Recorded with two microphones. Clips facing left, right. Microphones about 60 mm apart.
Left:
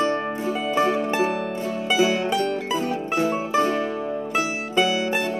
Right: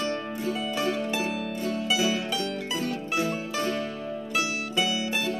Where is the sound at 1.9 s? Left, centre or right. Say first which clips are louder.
Left 8 dB; left.